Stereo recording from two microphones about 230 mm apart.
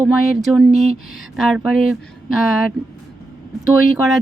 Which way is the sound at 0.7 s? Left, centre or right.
Right.